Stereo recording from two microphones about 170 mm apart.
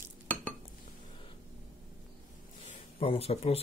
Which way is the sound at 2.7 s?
35° left (ahead or behind).